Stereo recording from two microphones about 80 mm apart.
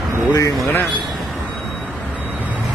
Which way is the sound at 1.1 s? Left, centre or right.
Centre.